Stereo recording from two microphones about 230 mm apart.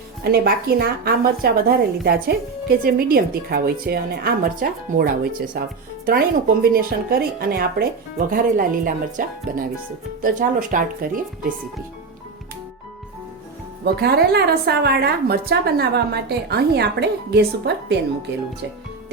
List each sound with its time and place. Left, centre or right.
0.3 s a woman's voice: right
13.8 s a woman's voice: right